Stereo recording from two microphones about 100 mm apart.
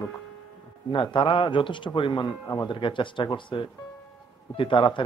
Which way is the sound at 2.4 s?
35° left (ahead or behind).